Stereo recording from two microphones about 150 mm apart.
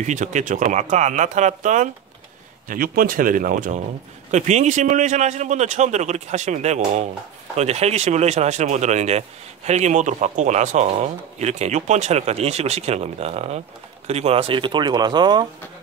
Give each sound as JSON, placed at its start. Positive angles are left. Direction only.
{"t": 0.0, "sound": "speech", "side_deg": -55}
{"t": 2.7, "sound": "speech", "side_deg": -70}
{"t": 4.3, "sound": "speech", "side_deg": -50}